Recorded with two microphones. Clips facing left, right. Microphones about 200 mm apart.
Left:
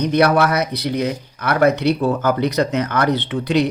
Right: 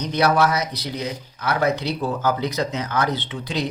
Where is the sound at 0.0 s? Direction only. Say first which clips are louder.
Left 4 dB; 60° left (ahead or behind).